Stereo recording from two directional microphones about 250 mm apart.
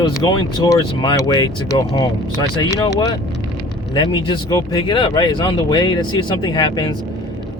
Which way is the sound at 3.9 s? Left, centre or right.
Centre.